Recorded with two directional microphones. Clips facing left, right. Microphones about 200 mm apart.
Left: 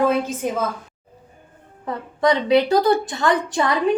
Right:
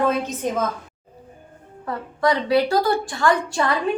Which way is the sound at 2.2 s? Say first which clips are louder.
Left 2 dB; 20° left (ahead or behind).